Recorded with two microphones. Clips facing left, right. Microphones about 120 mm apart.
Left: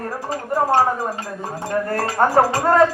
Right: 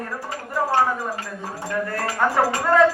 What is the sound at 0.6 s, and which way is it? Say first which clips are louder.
Speech: left 3 dB; 35° left (ahead or behind).